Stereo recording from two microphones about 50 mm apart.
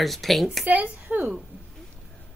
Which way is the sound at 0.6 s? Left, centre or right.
Right.